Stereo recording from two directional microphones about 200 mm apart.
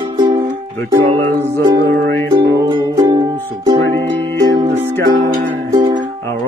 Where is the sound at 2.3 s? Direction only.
20° right (ahead or behind).